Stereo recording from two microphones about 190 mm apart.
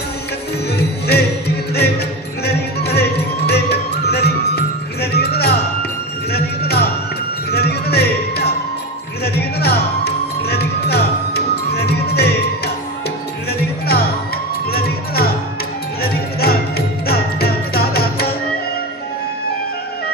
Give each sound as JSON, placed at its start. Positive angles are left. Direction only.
{"t": 2.4, "sound": "music", "side_deg": 60}